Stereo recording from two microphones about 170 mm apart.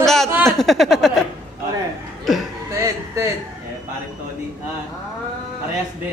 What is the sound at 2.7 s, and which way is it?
Speech, 15° right (ahead or behind).